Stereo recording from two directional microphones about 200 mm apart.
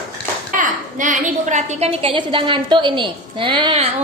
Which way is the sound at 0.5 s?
40° right (ahead or behind).